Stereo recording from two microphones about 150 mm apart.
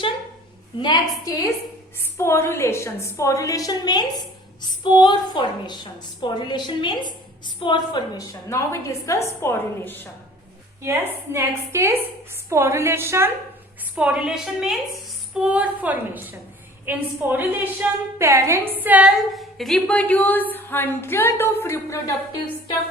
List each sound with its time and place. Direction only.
0.8 s a woman's voice: 25° left (ahead or behind)
10.8 s a woman's voice: 15° right (ahead or behind)
13.9 s a woman's voice: 5° right (ahead or behind); by 22.1 s 20° left (ahead or behind)